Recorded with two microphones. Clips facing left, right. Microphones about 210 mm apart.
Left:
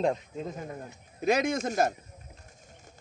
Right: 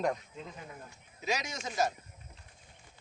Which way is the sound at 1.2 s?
55° left (ahead or behind).